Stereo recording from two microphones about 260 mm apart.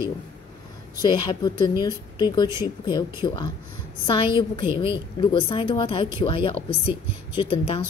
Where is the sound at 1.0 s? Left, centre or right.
Centre.